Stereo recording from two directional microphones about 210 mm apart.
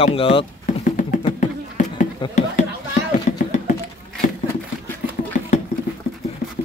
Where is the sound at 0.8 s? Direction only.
40° left (ahead or behind).